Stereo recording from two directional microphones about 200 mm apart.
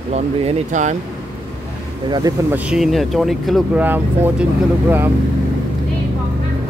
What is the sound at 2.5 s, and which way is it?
Speech, 5° right (ahead or behind).